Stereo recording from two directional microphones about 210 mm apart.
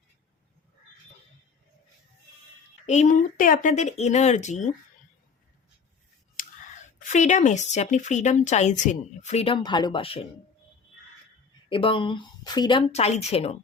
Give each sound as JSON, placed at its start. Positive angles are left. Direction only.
{"t": 2.8, "sound": "speech", "side_deg": 35}
{"t": 6.4, "sound": "scissors", "side_deg": 40}
{"t": 7.0, "sound": "speech", "side_deg": 35}
{"t": 11.7, "sound": "speech", "side_deg": 25}